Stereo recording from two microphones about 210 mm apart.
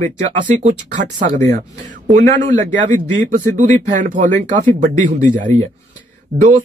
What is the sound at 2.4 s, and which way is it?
Speech, 40° right (ahead or behind).